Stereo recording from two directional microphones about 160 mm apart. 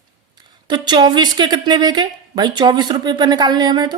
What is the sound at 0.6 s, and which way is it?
Speech, 30° right (ahead or behind).